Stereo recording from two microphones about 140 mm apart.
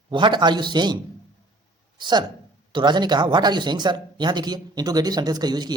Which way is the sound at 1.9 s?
30° right (ahead or behind).